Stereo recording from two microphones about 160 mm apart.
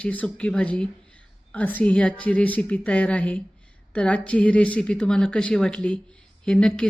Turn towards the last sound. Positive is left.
turn(degrees=5)  # may be behind; listen again after turning